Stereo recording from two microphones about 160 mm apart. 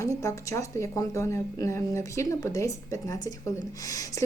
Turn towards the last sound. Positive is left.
turn(degrees=20)  # may be behind; listen again after turning